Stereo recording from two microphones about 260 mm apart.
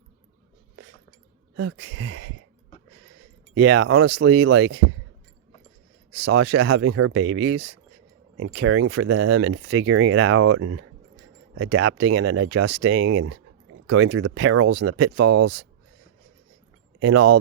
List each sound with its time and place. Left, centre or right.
1.5 s speech: right
2.0 s speech: right
3.5 s speech: right
6.1 s speech: right
13.8 s speech: right
14.3 s speech: right
15.2 s speech: right
17.0 s speech: right